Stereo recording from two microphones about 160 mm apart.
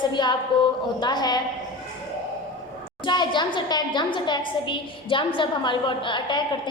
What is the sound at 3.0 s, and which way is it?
A woman's voice, 30° left (ahead or behind).